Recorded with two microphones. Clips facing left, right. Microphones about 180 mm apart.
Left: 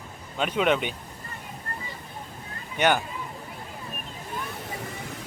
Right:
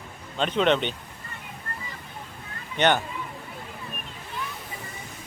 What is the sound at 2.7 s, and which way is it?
Speech, 10° left (ahead or behind).